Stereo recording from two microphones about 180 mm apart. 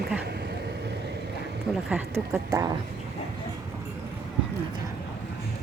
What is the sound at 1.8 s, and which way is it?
Speech, 10° right (ahead or behind).